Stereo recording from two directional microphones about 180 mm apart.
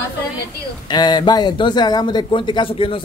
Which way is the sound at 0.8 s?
25° left (ahead or behind).